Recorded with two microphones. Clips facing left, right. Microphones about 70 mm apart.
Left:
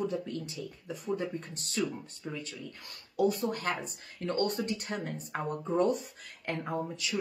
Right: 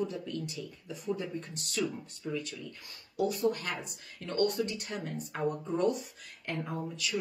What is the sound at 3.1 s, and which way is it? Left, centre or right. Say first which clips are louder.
Speech: left 1 dB; left.